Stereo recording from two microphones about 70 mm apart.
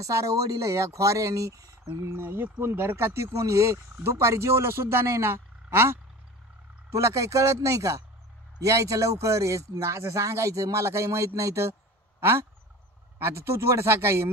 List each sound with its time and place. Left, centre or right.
0.0 s speech: right
1.9 s speech: right
6.9 s speech: right